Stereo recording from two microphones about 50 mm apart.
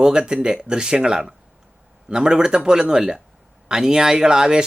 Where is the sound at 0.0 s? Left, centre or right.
Centre.